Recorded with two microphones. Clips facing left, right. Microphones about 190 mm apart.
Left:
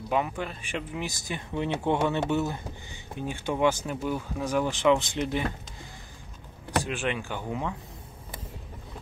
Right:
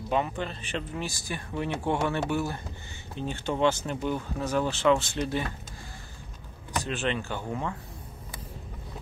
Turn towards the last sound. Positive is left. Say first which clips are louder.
# even
turn(degrees=15)  # may be behind; listen again after turning